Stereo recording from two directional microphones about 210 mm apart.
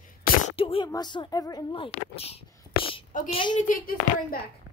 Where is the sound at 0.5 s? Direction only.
25° left (ahead or behind).